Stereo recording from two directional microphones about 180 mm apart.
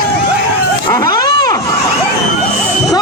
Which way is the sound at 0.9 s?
20° left (ahead or behind).